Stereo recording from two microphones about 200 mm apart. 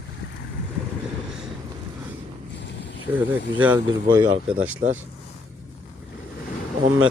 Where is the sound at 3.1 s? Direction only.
10° right (ahead or behind).